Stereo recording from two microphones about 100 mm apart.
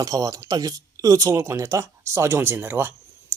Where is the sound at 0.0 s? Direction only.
35° right (ahead or behind).